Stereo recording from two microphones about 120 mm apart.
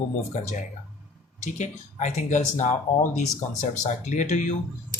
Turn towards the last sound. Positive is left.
turn(degrees=85)